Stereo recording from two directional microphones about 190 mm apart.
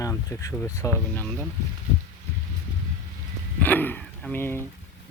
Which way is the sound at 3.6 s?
10° left (ahead or behind).